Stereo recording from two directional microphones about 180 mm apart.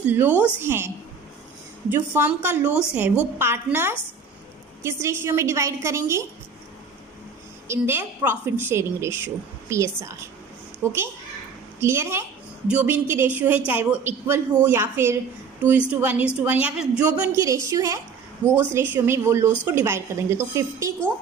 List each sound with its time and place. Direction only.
0.0 s a woman's voice: 10° right (ahead or behind)
1.9 s a woman's voice: 10° right (ahead or behind)
7.7 s a woman's voice: 10° right (ahead or behind)